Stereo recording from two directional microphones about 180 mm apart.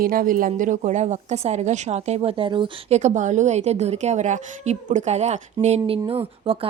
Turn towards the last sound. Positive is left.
turn(degrees=-30)  # may be behind; listen again after turning